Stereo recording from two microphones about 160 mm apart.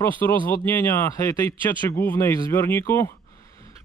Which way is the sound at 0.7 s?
15° left (ahead or behind).